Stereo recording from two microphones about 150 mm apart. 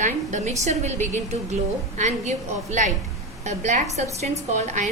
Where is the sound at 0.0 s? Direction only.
55° right (ahead or behind).